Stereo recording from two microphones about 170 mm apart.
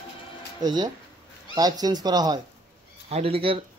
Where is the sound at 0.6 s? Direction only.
25° right (ahead or behind).